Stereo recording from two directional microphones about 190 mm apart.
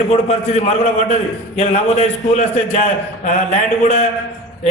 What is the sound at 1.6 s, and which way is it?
A man's voice, 35° left (ahead or behind).